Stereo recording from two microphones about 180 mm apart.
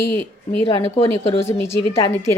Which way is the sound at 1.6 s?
35° left (ahead or behind).